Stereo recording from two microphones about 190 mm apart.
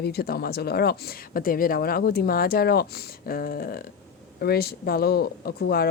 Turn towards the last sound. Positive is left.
turn(degrees=55)  # may be behind; listen again after turning